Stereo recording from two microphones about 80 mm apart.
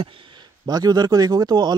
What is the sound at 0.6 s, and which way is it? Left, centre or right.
Speech, right.